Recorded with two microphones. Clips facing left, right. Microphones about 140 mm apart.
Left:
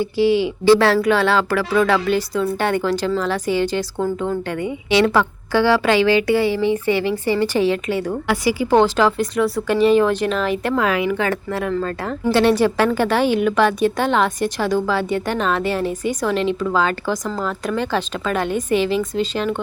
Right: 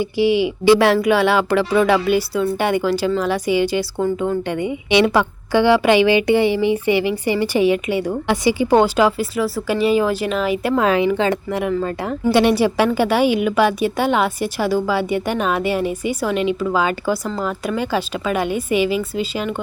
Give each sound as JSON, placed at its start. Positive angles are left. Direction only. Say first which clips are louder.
{"t": 0.0, "sound": "a woman's voice", "louder": "even", "side_deg": -15}
{"t": 10.8, "sound": "a woman's voice", "louder": "right 4 dB", "side_deg": -30}